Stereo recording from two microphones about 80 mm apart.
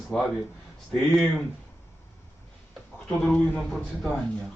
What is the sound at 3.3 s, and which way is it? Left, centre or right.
Speech, centre.